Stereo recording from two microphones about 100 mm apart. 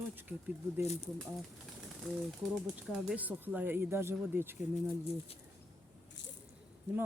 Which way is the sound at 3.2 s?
15° right (ahead or behind).